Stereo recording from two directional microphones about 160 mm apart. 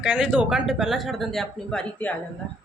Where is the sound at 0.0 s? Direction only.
5° right (ahead or behind).